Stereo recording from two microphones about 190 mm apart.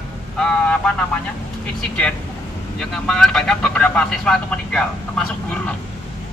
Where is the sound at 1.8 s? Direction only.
5° left (ahead or behind).